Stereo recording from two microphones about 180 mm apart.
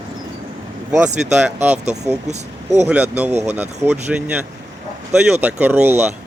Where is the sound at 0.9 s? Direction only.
10° right (ahead or behind).